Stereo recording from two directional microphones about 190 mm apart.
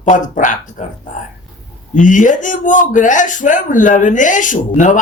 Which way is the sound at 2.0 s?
45° left (ahead or behind).